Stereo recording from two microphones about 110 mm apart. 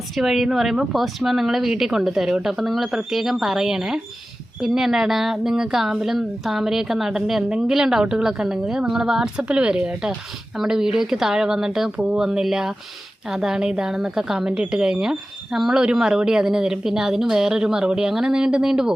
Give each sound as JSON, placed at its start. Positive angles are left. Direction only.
{"t": 0.2, "sound": "a woman's voice", "side_deg": 0}